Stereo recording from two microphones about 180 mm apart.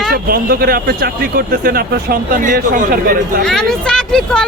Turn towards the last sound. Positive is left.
turn(degrees=5)  # may be behind; listen again after turning